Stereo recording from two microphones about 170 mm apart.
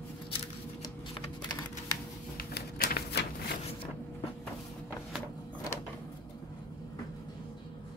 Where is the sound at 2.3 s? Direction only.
65° left (ahead or behind).